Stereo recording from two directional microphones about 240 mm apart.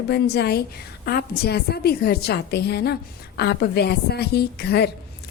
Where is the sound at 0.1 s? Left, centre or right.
Left.